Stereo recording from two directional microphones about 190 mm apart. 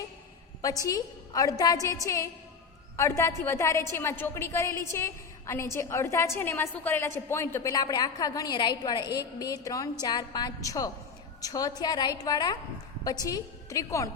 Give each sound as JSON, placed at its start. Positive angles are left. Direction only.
{"t": 0.9, "sound": "a woman's voice", "side_deg": 20}